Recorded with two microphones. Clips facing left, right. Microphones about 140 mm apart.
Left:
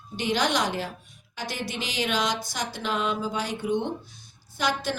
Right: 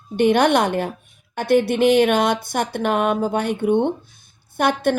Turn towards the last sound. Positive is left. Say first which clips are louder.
# right 9 dB
turn(degrees=-55)  # may be behind; listen again after turning